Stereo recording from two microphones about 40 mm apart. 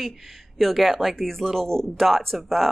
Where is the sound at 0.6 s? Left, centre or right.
Centre.